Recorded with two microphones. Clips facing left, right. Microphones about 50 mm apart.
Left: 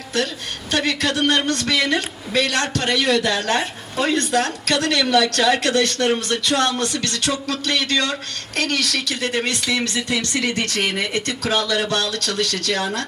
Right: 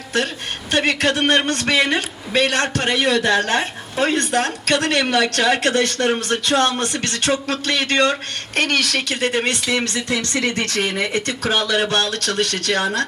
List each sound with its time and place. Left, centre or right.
0.7 s a man's voice: right